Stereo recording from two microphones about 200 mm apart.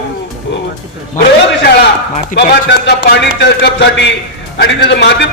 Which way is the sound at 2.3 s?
55° left (ahead or behind).